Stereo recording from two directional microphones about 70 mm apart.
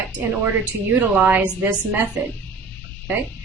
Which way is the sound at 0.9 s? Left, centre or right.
Right.